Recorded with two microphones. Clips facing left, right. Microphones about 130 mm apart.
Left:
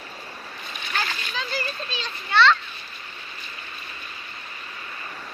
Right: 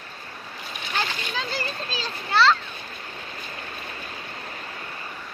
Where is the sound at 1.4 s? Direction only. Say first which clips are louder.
Left 1 dB; 30° right (ahead or behind).